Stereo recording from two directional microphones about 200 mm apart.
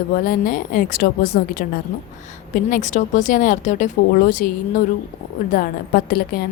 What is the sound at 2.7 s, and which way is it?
A woman's voice, 35° left (ahead or behind).